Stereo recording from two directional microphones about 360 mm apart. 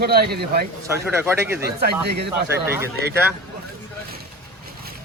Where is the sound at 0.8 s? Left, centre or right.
Centre.